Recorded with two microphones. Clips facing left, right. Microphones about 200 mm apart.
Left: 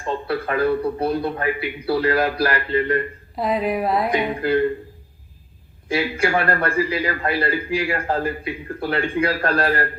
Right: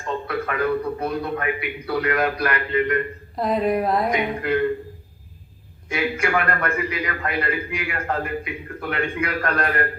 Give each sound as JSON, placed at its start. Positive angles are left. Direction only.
{"t": 0.0, "sound": "a man's voice", "side_deg": 30}
{"t": 3.3, "sound": "speech", "side_deg": 0}
{"t": 4.1, "sound": "a man's voice", "side_deg": 30}
{"t": 5.9, "sound": "a man's voice", "side_deg": 30}